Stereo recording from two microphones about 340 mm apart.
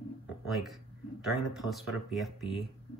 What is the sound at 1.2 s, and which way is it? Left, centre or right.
Speech, centre.